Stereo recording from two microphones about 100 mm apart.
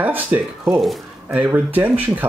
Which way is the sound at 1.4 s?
15° right (ahead or behind).